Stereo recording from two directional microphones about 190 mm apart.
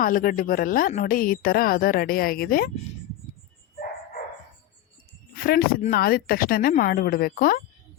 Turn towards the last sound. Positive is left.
turn(degrees=50)  # may be behind; listen again after turning